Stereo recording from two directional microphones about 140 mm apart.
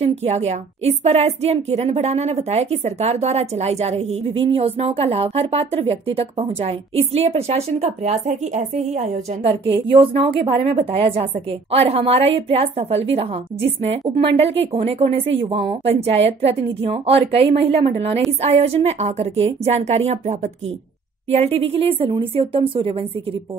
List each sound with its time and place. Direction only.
0.0 s a woman's voice: 50° right (ahead or behind)